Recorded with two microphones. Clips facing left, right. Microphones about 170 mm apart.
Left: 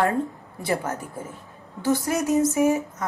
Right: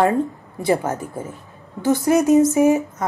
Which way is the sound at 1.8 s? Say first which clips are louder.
Right 6 dB; 20° right (ahead or behind).